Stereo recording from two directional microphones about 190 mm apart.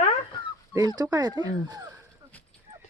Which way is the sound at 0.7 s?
20° right (ahead or behind).